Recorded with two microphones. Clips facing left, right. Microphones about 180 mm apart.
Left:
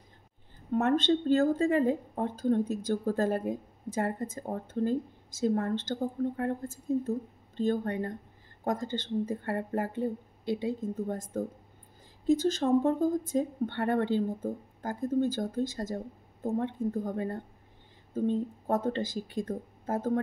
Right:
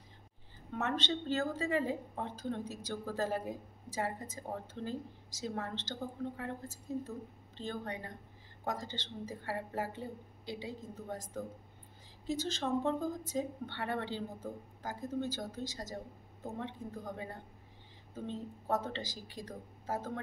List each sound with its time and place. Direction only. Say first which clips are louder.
0.7 s speech: left 10 dB; 50° left (ahead or behind)
18.7 s speech: left 6 dB; 50° left (ahead or behind)